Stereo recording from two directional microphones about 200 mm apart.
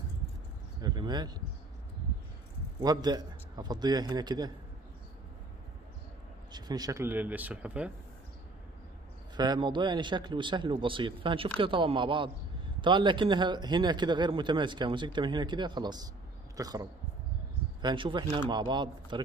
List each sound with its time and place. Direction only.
0.7 s speech: 20° right (ahead or behind)
2.8 s speech: 20° right (ahead or behind)
6.5 s speech: 20° right (ahead or behind)
9.4 s speech: 20° right (ahead or behind)
17.8 s speech: 25° right (ahead or behind)